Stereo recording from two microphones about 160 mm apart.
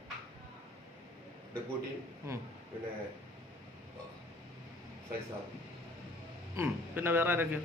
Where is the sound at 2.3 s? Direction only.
20° right (ahead or behind).